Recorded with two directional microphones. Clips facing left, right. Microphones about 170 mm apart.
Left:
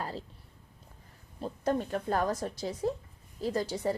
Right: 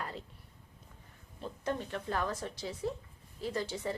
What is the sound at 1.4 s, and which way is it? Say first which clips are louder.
Speech: left 6 dB; 40° left (ahead or behind).